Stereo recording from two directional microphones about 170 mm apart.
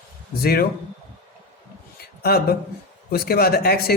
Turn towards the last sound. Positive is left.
turn(degrees=65)  # may be behind; listen again after turning